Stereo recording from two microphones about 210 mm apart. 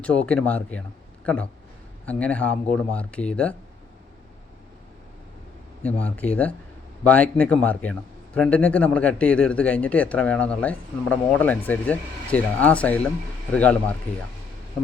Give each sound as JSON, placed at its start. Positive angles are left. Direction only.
{"t": 0.0, "sound": "a man's voice", "side_deg": 5}
{"t": 5.8, "sound": "a man's voice", "side_deg": 5}